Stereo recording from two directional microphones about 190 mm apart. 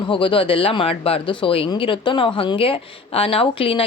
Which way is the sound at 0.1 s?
30° left (ahead or behind).